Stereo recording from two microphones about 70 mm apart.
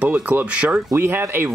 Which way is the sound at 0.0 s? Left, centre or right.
Right.